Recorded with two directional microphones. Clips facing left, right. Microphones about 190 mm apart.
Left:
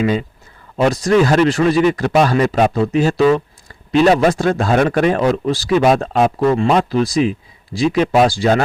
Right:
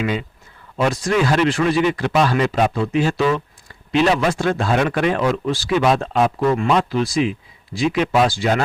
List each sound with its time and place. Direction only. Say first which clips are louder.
0.0 s speech: left 5 dB; 40° left (ahead or behind)